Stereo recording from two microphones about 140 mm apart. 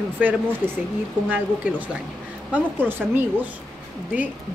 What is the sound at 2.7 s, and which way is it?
Speech, 15° right (ahead or behind).